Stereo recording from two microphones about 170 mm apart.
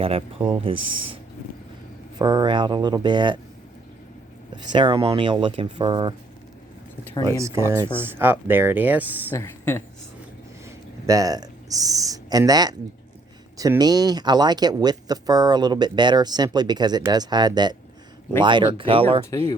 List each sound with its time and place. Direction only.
0.0 s speech: 35° right (ahead or behind)
2.1 s speech: 25° right (ahead or behind)
4.5 s speech: 25° right (ahead or behind)
7.3 s speech: 20° right (ahead or behind)
9.3 s speech: 15° left (ahead or behind)
10.7 s a sound: 20° right (ahead or behind)
13.6 s speech: 20° right (ahead or behind)